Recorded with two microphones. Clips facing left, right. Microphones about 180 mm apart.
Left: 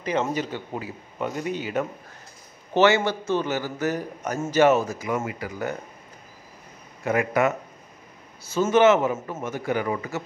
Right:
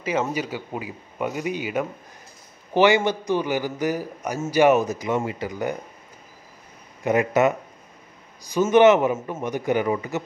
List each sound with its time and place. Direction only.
0.0 s a man's voice: 5° right (ahead or behind)
7.1 s a man's voice: 20° right (ahead or behind)